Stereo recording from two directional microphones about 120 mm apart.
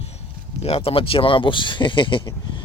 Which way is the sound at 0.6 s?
55° left (ahead or behind).